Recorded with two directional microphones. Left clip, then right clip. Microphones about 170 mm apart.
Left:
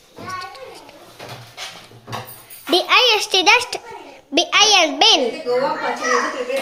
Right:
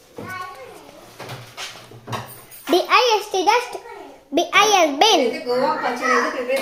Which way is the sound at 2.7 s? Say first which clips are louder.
Left 2 dB; centre (ahead or behind).